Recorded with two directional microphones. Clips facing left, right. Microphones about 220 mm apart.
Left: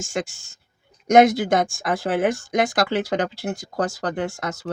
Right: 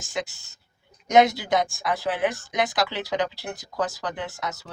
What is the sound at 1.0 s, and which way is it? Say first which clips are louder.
Speech: left 4 dB; 50° left (ahead or behind).